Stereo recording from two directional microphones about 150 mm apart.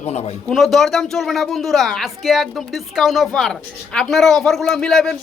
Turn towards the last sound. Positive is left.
turn(degrees=5)  # may be behind; listen again after turning